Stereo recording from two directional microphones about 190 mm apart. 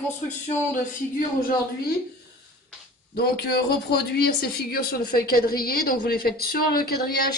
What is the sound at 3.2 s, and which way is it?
A man's voice, 55° left (ahead or behind).